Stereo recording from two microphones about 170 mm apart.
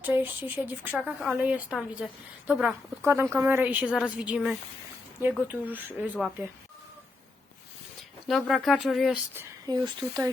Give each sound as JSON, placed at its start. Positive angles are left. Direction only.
{"t": 0.0, "sound": "speech", "side_deg": -10}
{"t": 8.3, "sound": "speech", "side_deg": 0}
{"t": 9.6, "sound": "speech", "side_deg": -25}